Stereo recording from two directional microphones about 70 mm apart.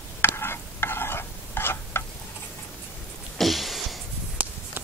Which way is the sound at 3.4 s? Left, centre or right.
Centre.